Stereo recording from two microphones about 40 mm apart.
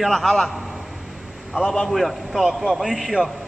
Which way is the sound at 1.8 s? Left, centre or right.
Centre.